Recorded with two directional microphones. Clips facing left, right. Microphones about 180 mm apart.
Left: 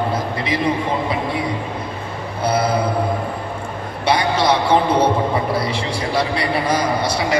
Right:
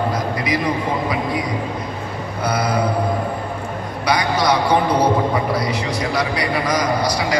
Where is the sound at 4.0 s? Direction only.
25° left (ahead or behind).